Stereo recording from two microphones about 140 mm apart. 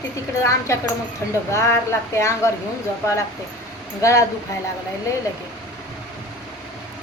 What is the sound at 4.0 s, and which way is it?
Speech, 20° left (ahead or behind).